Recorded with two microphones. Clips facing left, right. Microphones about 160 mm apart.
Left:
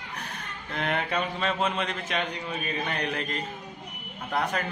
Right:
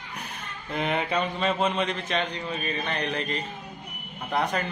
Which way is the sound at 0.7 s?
5° right (ahead or behind).